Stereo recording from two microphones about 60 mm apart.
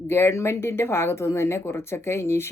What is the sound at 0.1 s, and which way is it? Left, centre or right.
Speech, left.